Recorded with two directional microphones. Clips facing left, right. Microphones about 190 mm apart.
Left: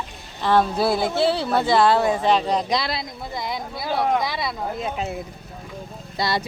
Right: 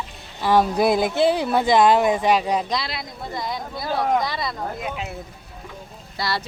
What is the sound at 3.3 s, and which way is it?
Speech, 10° left (ahead or behind).